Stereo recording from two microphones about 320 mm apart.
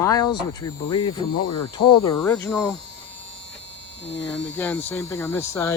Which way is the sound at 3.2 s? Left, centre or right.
Left.